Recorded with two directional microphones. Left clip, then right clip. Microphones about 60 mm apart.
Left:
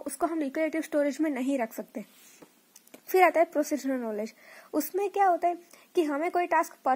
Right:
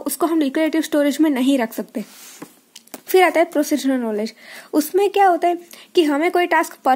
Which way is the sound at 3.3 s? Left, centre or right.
Centre.